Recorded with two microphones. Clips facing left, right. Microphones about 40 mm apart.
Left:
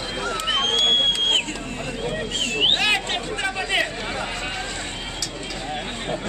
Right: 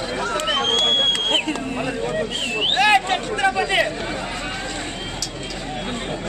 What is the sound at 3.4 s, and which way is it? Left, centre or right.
Speech, centre.